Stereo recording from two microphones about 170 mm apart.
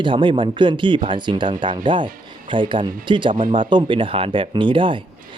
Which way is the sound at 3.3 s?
50° right (ahead or behind).